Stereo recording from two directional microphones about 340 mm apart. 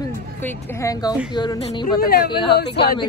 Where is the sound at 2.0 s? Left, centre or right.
Left.